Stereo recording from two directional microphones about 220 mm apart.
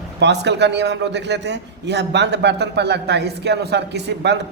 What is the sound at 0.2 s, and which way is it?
A man's voice, 50° right (ahead or behind).